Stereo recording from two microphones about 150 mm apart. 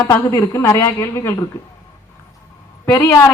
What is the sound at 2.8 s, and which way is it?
Speech, 20° left (ahead or behind).